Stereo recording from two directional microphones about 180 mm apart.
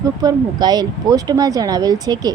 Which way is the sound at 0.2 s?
20° right (ahead or behind).